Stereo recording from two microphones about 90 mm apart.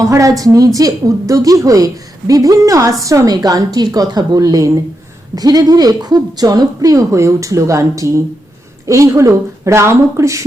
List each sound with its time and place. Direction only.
0.0 s a woman's voice: 35° right (ahead or behind)